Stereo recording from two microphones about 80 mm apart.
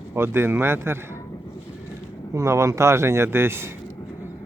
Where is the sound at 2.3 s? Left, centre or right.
Right.